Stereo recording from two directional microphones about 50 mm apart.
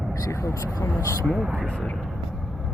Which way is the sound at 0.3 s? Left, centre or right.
Left.